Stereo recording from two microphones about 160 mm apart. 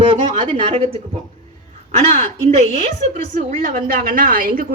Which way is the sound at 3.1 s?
50° right (ahead or behind).